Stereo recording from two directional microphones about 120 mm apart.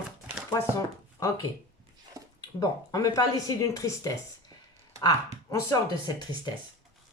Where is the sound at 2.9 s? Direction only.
30° left (ahead or behind).